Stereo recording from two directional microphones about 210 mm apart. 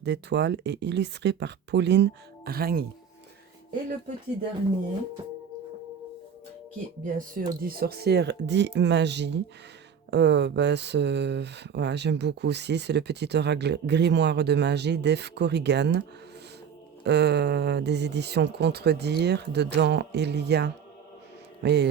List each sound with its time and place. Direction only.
0.0 s speech: 55° right (ahead or behind)
7.0 s a man's voice: 40° right (ahead or behind)